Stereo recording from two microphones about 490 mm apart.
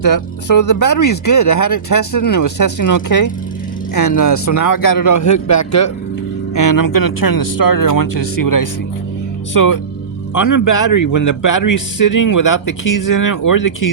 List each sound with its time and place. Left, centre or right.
0.0 s a man's voice: left